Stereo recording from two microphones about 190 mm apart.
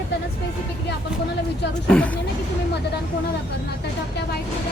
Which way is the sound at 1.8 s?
5° left (ahead or behind).